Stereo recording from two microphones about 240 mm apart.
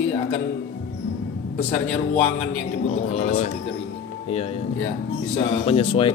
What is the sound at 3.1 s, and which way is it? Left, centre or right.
Speech, left.